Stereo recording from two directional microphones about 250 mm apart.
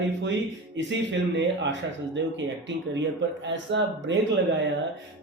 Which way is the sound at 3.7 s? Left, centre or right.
Right.